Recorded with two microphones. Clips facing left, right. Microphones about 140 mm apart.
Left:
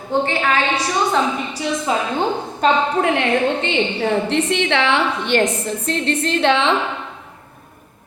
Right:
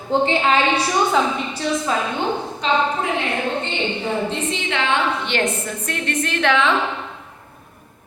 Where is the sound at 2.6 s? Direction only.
65° left (ahead or behind).